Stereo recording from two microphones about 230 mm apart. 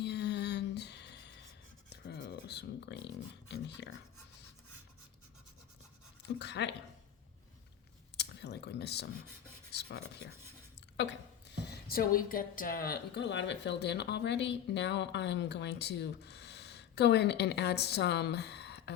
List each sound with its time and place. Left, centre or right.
0.0 s music: left
2.0 s a sound: left
3.5 s a woman's voice: left
6.4 s a woman's voice: left
8.1 s speech: left
10.9 s a woman's voice: left